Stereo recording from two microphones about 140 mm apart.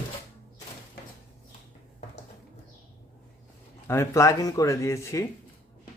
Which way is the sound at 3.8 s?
20° left (ahead or behind).